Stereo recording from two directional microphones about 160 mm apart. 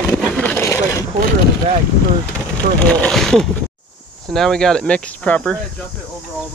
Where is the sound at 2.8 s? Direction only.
10° left (ahead or behind).